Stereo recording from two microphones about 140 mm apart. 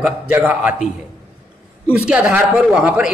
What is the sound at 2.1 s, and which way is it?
A man's voice, 10° right (ahead or behind).